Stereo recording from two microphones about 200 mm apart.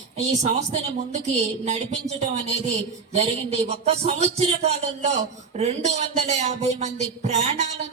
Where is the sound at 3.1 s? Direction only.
30° right (ahead or behind).